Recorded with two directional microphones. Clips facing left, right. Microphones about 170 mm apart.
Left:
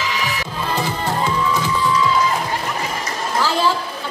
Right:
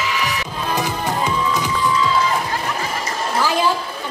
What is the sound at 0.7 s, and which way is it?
Music, 15° right (ahead or behind).